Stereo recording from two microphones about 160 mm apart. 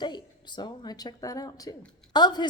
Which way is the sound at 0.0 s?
25° left (ahead or behind).